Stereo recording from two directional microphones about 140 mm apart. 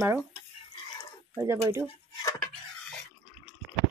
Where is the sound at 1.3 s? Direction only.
20° right (ahead or behind).